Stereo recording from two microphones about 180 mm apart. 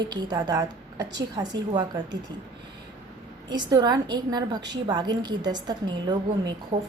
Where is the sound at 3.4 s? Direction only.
20° right (ahead or behind).